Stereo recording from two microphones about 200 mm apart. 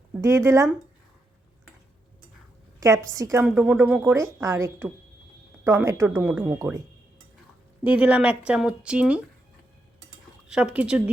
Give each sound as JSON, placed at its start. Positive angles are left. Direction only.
{"t": 0.1, "sound": "speech", "side_deg": -15}
{"t": 2.8, "sound": "a woman's voice", "side_deg": -15}
{"t": 7.9, "sound": "speech", "side_deg": -5}
{"t": 10.5, "sound": "speech", "side_deg": -5}